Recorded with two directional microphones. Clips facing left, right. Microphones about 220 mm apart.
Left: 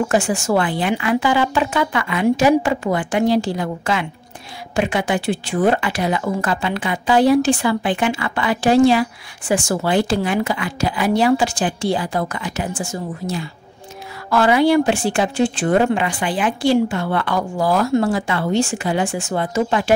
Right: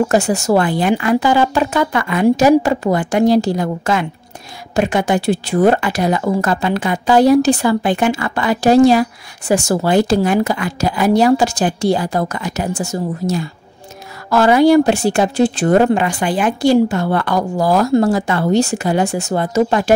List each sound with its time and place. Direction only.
0.1 s speech: 40° right (ahead or behind)